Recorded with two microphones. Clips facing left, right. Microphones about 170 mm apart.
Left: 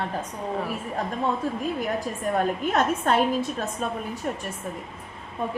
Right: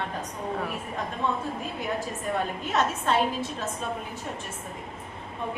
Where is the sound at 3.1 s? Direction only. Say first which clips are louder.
Left 2 dB; 50° left (ahead or behind).